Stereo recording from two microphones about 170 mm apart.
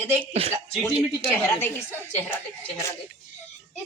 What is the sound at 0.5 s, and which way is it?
A child's voice, 10° left (ahead or behind).